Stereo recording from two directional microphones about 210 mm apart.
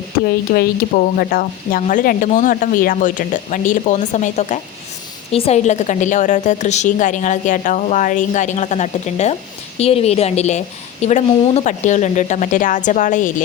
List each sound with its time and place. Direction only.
0.3 s speech: 50° left (ahead or behind)